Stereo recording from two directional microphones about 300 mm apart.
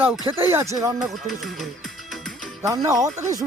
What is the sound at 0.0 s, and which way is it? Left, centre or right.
Speech, centre.